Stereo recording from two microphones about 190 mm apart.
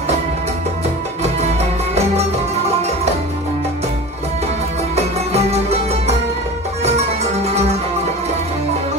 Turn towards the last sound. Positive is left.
turn(degrees=-35)  # may be behind; listen again after turning